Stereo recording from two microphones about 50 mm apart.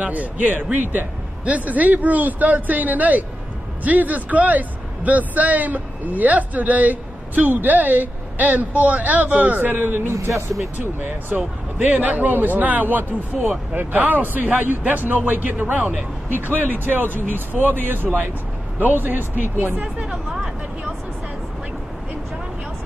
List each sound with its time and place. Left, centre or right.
0.0 s speech: right
10.0 s speech: right
10.8 s speech: right